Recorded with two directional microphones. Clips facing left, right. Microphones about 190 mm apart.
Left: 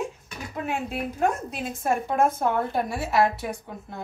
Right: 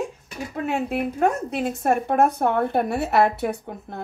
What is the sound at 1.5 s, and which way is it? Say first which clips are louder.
A woman's voice: right 5 dB; 60° right (ahead or behind).